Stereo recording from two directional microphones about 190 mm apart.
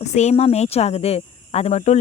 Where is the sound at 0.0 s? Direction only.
35° left (ahead or behind).